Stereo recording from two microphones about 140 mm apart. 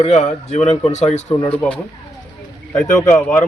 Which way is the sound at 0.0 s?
55° left (ahead or behind).